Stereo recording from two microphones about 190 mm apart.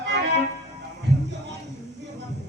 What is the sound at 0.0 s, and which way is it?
Music, 65° right (ahead or behind).